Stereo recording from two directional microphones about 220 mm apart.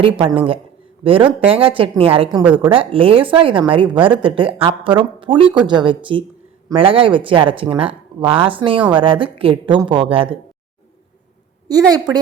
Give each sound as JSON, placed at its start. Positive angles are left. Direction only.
{"t": 0.0, "sound": "a woman's voice", "side_deg": -25}
{"t": 2.4, "sound": "a woman's voice", "side_deg": -10}
{"t": 2.6, "sound": "a woman's voice", "side_deg": -25}
{"t": 11.7, "sound": "a woman's voice", "side_deg": -15}